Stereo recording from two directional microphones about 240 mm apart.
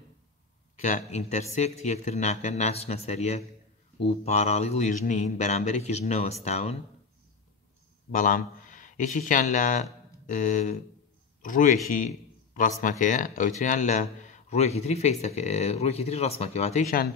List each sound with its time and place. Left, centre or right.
0.7 s a man's voice: left
8.1 s a man's voice: left